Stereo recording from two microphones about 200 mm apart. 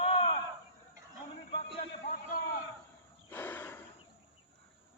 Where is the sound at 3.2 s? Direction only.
10° left (ahead or behind).